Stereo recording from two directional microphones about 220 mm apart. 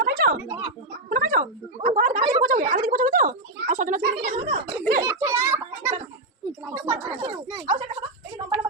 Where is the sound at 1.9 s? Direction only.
35° right (ahead or behind).